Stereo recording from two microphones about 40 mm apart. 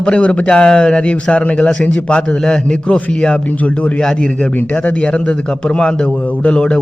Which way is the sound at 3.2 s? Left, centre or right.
Left.